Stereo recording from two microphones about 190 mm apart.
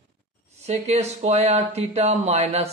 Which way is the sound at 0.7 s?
35° right (ahead or behind).